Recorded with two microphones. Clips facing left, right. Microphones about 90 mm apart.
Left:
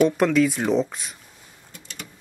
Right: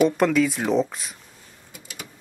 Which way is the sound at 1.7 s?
5° right (ahead or behind).